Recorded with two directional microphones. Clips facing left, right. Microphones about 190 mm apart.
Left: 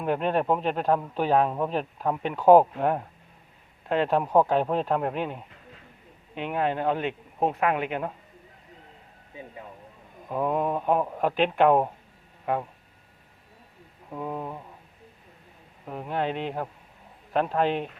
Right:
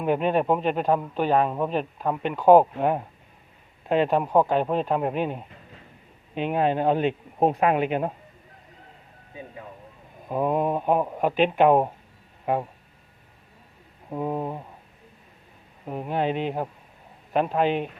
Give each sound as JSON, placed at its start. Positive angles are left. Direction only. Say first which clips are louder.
{"t": 0.0, "sound": "speech", "louder": "right 3 dB", "side_deg": -5}
{"t": 6.3, "sound": "a man's voice", "louder": "right 4 dB", "side_deg": -25}
{"t": 10.2, "sound": "speech", "louder": "right 2 dB", "side_deg": -15}
{"t": 14.1, "sound": "a man's voice", "louder": "right 5 dB", "side_deg": -25}
{"t": 15.9, "sound": "speech", "louder": "right 3 dB", "side_deg": -15}